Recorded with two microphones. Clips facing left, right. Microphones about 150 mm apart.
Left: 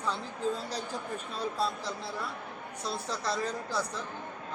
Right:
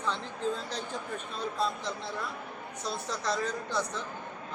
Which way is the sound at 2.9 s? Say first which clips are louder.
Right 1 dB; centre (ahead or behind).